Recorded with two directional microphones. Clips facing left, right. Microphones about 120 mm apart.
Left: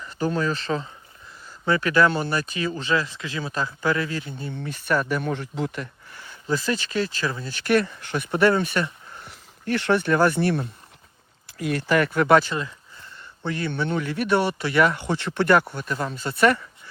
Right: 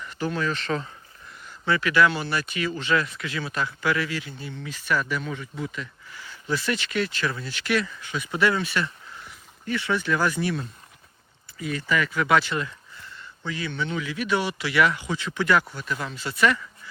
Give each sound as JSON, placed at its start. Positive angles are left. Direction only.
{"t": 0.0, "sound": "speech", "side_deg": 35}
{"t": 4.5, "sound": "speech", "side_deg": 50}
{"t": 6.5, "sound": "speech", "side_deg": 35}
{"t": 7.4, "sound": "speech", "side_deg": 45}
{"t": 9.2, "sound": "speech", "side_deg": 65}
{"t": 13.5, "sound": "speech", "side_deg": 55}
{"t": 15.9, "sound": "speech", "side_deg": 40}